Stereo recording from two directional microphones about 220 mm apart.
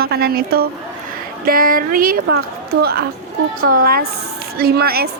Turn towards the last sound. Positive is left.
turn(degrees=-45)  # may be behind; listen again after turning